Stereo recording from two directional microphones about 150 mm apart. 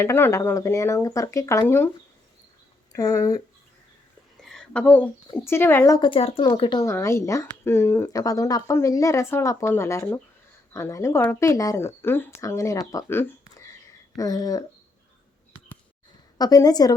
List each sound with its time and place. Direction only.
0.0 s speech: 15° left (ahead or behind)
2.9 s speech: 20° left (ahead or behind)
4.4 s a sound: 5° left (ahead or behind)
5.5 s a woman's voice: 15° left (ahead or behind)
6.0 s speech: 40° left (ahead or behind)
6.9 s a woman's voice: 20° left (ahead or behind)
12.9 s a sound: 20° left (ahead or behind)
14.2 s speech: 25° left (ahead or behind)
16.4 s speech: 25° left (ahead or behind)